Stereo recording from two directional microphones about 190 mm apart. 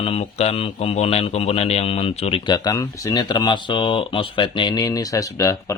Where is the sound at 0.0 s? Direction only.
30° left (ahead or behind).